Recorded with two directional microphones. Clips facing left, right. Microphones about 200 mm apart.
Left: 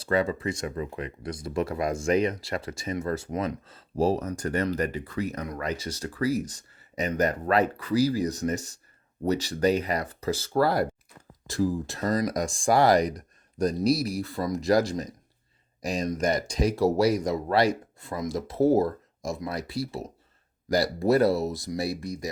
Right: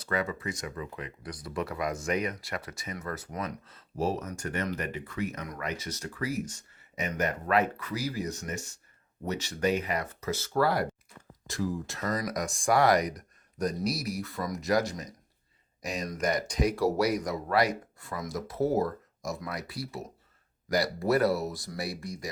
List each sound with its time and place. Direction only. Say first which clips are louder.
0.0 s speech: left 6 dB; 30° left (ahead or behind)